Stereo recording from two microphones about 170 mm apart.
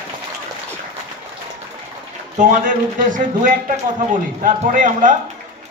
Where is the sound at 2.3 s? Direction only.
50° right (ahead or behind).